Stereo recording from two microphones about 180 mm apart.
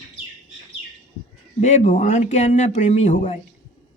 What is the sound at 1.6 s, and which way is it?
Speech, 40° left (ahead or behind).